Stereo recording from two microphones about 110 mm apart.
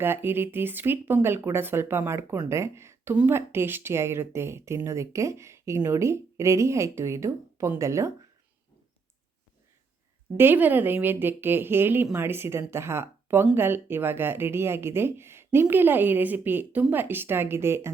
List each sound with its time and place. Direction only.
0.0 s speech: 20° right (ahead or behind)
10.3 s speech: 20° right (ahead or behind)